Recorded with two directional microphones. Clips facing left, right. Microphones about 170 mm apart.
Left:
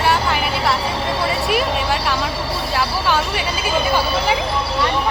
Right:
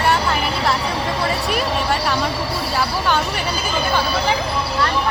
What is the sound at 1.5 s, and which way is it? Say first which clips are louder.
Speech: left 1 dB; centre (ahead or behind).